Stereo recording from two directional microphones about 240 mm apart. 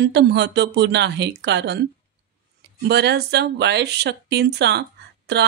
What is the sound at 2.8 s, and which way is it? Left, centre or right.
Speech, right.